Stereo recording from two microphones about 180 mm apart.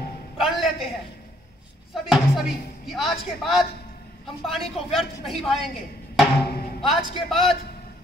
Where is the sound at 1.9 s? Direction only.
5° right (ahead or behind).